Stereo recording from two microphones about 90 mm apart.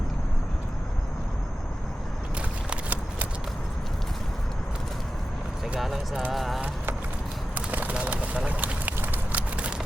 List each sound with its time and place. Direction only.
2.6 s horse: 20° right (ahead or behind)
5.8 s a sound: centre (ahead or behind)
6.3 s speech: centre (ahead or behind)
7.5 s bird: 20° right (ahead or behind)